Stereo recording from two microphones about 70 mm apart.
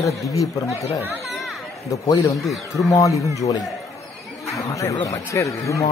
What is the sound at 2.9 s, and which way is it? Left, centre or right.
Speech, left.